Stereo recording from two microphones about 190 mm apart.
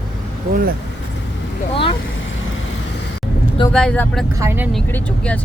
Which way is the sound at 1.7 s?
30° left (ahead or behind).